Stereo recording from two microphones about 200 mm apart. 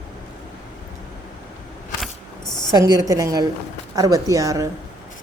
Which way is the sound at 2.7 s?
15° right (ahead or behind).